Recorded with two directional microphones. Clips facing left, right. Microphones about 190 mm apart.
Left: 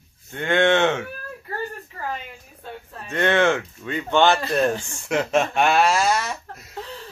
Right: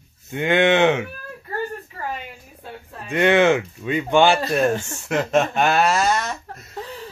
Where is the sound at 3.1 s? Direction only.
10° right (ahead or behind).